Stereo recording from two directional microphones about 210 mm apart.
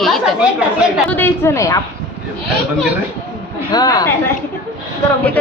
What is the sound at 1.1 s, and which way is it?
Speech, 10° left (ahead or behind).